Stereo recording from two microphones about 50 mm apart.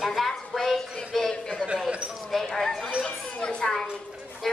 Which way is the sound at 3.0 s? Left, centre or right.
Left.